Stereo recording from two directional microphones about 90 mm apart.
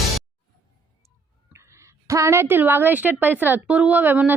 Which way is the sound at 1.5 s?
35° right (ahead or behind).